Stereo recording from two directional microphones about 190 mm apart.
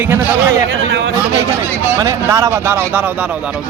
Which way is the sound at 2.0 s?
15° right (ahead or behind).